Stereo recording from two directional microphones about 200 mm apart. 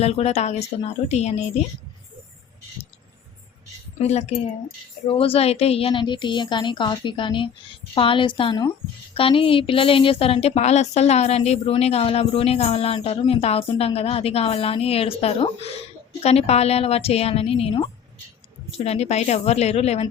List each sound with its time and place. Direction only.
0.0 s a woman's voice: 30° left (ahead or behind)
4.0 s a woman's voice: 35° left (ahead or behind)
18.9 s a woman's voice: 30° left (ahead or behind)